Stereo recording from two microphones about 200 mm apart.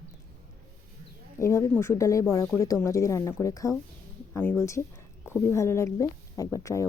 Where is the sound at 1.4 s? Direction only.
15° left (ahead or behind).